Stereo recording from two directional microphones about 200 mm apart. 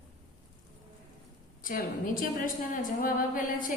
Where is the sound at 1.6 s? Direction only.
45° left (ahead or behind).